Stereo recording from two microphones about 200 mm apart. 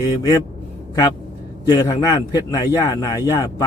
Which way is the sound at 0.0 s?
20° left (ahead or behind).